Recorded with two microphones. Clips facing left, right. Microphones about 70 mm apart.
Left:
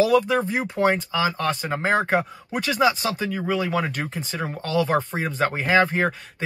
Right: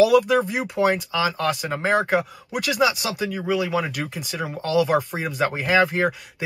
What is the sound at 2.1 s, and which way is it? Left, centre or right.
Speech, left.